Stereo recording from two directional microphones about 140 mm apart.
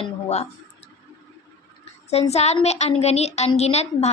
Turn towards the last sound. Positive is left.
turn(degrees=50)  # may be behind; listen again after turning